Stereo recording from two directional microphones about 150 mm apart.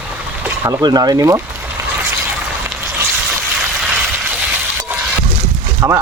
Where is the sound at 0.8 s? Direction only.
25° right (ahead or behind).